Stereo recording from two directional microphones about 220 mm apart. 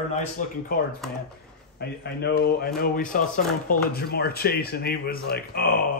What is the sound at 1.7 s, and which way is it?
Speech, 45° left (ahead or behind).